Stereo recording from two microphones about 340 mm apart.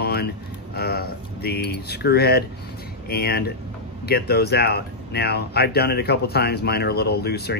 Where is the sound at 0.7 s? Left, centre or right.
Left.